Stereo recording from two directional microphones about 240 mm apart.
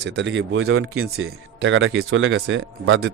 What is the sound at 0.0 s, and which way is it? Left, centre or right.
A man's voice, right.